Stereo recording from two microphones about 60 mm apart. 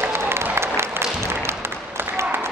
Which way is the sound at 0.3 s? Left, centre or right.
Right.